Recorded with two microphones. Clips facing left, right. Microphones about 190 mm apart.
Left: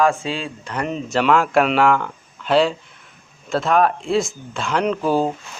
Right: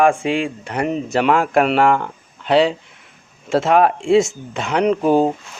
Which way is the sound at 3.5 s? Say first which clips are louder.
Right 3 dB; 25° right (ahead or behind).